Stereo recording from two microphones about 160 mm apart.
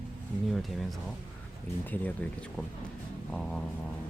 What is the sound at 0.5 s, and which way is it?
Speech, centre (ahead or behind).